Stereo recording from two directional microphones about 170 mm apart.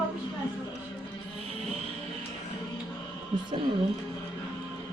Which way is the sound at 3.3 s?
25° right (ahead or behind).